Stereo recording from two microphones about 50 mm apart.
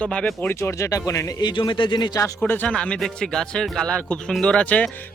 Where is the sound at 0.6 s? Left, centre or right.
Left.